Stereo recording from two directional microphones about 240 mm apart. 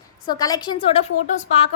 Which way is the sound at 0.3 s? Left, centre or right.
Centre.